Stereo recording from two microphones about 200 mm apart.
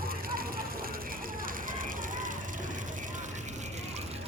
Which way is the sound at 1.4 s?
45° right (ahead or behind).